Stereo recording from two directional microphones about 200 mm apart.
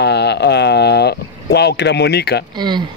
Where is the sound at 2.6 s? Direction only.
20° right (ahead or behind).